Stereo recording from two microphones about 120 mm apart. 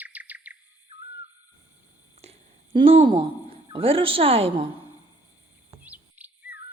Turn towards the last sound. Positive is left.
turn(degrees=-15)  # may be behind; listen again after turning